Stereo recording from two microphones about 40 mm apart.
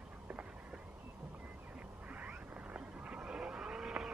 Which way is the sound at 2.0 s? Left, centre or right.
Right.